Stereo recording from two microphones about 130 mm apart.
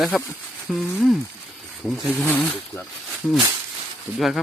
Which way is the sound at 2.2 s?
15° left (ahead or behind).